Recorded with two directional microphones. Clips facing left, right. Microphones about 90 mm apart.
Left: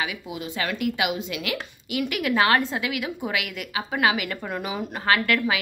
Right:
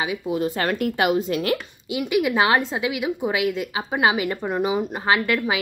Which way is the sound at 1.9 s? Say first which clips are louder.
Right 4 dB; 20° right (ahead or behind).